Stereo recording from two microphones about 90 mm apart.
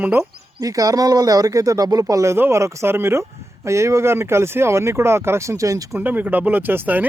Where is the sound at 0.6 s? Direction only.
40° right (ahead or behind).